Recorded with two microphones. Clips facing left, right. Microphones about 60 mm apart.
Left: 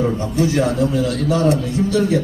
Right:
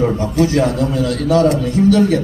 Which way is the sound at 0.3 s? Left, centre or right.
Right.